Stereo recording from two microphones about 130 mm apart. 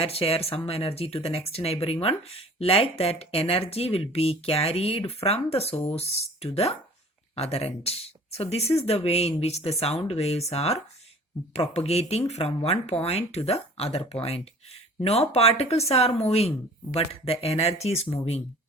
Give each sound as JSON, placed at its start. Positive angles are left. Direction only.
{"t": 0.0, "sound": "speech", "side_deg": 50}